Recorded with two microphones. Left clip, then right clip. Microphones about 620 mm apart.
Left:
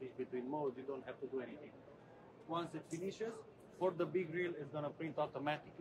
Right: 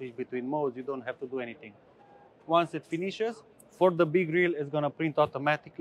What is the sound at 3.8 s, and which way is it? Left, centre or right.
A man's voice, right.